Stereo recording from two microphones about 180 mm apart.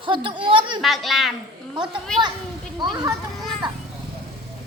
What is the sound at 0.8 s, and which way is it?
Speech, centre (ahead or behind).